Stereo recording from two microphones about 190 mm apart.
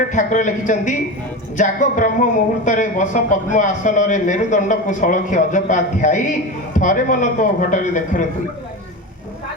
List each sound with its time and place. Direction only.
0.0 s speech: 40° left (ahead or behind)